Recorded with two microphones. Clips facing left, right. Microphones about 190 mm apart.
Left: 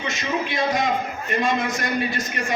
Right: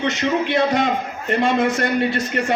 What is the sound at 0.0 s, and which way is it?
A man's voice, 65° right (ahead or behind).